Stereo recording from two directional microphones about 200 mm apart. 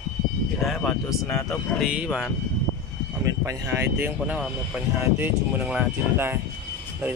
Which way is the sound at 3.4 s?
15° right (ahead or behind).